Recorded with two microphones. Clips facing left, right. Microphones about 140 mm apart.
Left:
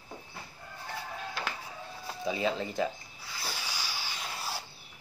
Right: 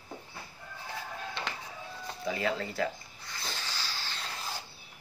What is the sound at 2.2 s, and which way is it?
Speech, 20° left (ahead or behind).